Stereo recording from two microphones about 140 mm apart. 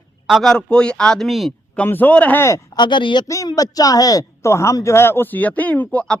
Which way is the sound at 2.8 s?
35° left (ahead or behind).